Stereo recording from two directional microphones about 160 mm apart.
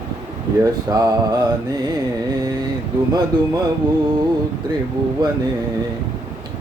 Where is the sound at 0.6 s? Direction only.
25° right (ahead or behind).